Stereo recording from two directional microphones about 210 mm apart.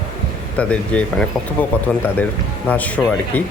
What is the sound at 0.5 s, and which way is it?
Speech, 5° left (ahead or behind).